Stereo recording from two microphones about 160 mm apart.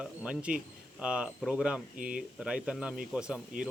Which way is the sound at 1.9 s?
60° right (ahead or behind).